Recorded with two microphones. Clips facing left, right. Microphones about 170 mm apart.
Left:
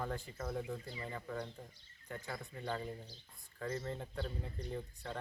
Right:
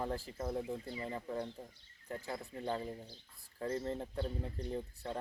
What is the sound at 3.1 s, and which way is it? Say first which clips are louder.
Speech: right 3 dB; 25° right (ahead or behind).